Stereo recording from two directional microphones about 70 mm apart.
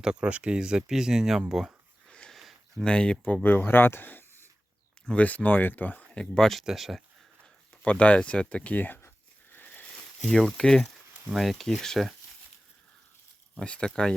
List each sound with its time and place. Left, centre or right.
0.0 s speech: centre
2.0 s a sound: centre
2.3 s a sound: centre
2.8 s speech: centre
3.4 s speech: left
6.3 s speech: centre
7.8 s a sound: centre
10.3 s speech: centre
13.7 s speech: centre